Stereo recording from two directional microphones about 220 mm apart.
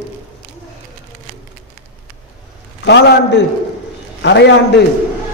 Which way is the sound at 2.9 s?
50° left (ahead or behind).